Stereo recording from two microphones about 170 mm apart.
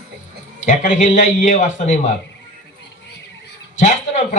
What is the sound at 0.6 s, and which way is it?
Speech, 45° left (ahead or behind).